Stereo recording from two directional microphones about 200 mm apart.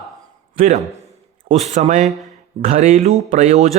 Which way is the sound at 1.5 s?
35° right (ahead or behind).